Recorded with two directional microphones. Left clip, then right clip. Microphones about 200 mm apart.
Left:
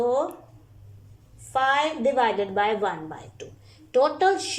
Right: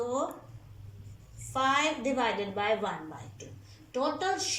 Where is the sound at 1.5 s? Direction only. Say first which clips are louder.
Left 5 dB; 40° left (ahead or behind).